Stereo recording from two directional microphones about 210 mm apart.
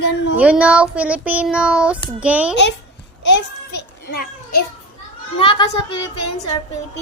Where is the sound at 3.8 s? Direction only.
50° left (ahead or behind).